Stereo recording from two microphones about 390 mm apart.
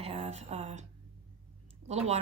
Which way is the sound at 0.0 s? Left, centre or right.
Centre.